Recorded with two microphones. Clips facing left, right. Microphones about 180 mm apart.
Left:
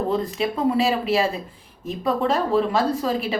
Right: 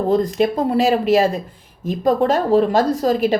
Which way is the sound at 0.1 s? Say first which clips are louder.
Right 7 dB; 40° right (ahead or behind).